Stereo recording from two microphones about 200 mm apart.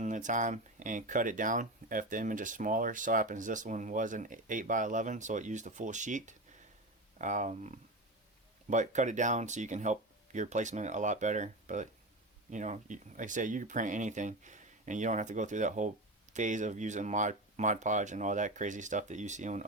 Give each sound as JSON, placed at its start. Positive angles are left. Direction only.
{"t": 0.0, "sound": "speech", "side_deg": -40}